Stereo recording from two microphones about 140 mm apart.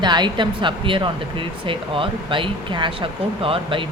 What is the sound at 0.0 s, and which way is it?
Speech, 30° right (ahead or behind).